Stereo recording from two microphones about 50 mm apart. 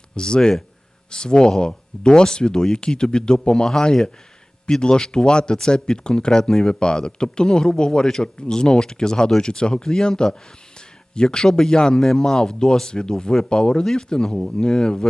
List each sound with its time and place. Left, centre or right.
0.2 s speech: centre